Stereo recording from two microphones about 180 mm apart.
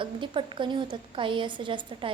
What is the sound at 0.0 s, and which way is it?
A woman's voice, 25° right (ahead or behind).